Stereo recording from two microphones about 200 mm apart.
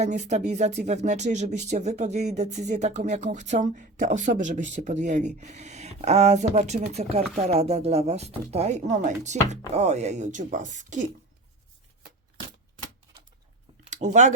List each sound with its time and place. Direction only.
0.0 s speech: 35° right (ahead or behind)
13.8 s speech: 35° right (ahead or behind)